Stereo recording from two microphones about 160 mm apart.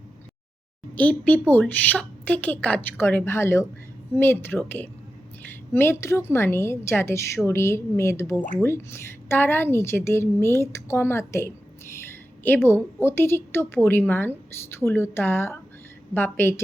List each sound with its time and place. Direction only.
0.9 s a woman's voice: 10° left (ahead or behind)
12.6 s a woman's voice: 15° left (ahead or behind)